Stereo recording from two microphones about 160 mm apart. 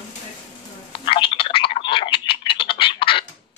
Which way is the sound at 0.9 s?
30° left (ahead or behind).